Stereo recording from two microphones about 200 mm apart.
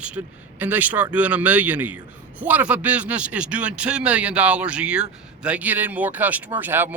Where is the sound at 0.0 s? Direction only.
5° right (ahead or behind).